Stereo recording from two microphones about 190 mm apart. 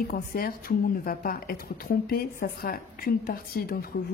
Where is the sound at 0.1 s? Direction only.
50° left (ahead or behind).